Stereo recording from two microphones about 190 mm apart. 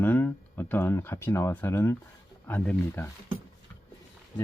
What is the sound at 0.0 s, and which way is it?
Speech, 10° left (ahead or behind).